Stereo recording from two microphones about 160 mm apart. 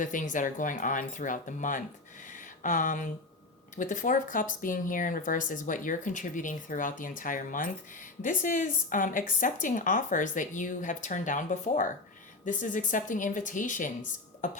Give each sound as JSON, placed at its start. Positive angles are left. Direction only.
{"t": 0.0, "sound": "speech", "side_deg": 55}
{"t": 2.3, "sound": "a sound", "side_deg": 55}
{"t": 3.8, "sound": "speech", "side_deg": 55}